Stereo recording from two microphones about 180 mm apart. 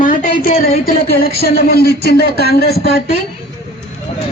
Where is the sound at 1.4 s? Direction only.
60° left (ahead or behind).